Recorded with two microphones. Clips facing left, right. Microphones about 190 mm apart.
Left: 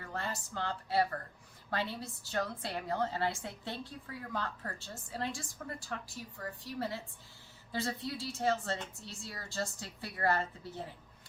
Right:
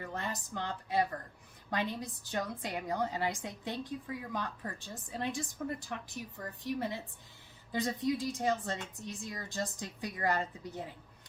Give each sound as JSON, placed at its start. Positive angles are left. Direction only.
{"t": 0.0, "sound": "a woman's voice", "side_deg": -20}